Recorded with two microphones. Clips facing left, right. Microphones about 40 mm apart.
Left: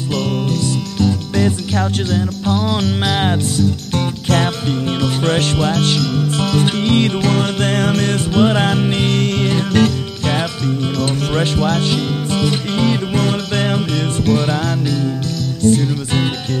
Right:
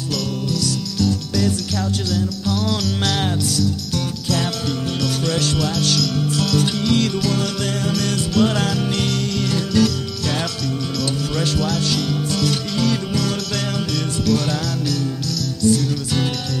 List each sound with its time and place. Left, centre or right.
0.1 s music: left